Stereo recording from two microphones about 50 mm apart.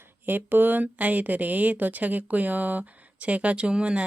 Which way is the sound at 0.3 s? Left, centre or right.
Right.